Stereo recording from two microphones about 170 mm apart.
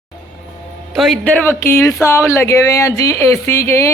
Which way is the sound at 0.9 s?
Centre (ahead or behind).